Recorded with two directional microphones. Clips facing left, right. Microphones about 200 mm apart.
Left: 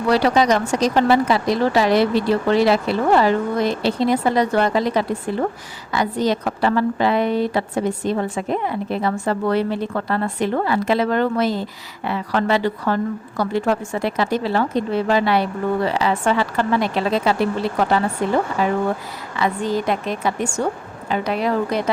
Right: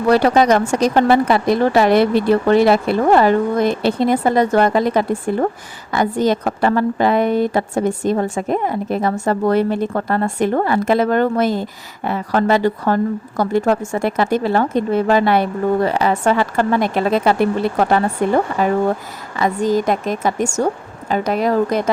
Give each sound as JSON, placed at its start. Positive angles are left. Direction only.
{"t": 0.1, "sound": "a woman's voice", "side_deg": -50}